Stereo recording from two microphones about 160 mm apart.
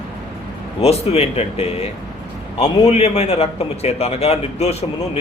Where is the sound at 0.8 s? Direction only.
40° left (ahead or behind).